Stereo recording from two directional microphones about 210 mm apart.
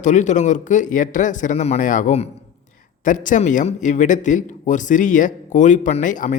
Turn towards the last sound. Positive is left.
turn(degrees=35)  # may be behind; listen again after turning